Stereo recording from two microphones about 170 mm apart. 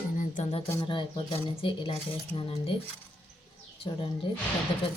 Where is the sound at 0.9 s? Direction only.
30° left (ahead or behind).